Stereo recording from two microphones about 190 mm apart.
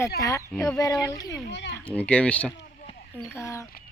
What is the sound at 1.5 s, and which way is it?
Speech, 65° left (ahead or behind).